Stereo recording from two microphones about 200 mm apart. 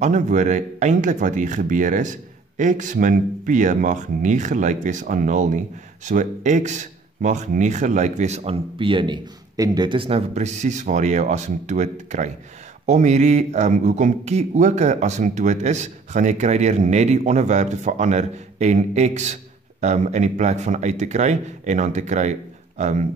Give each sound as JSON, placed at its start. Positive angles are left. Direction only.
{"t": 0.0, "sound": "speech", "side_deg": -35}